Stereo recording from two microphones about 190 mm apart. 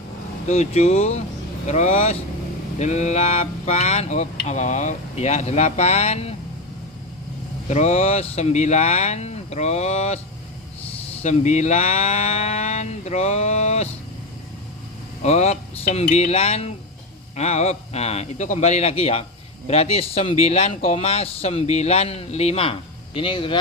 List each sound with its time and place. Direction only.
0.4 s speech: 35° left (ahead or behind)
7.7 s speech: 35° left (ahead or behind)
11.2 s speech: 35° left (ahead or behind)
15.2 s speech: 35° left (ahead or behind)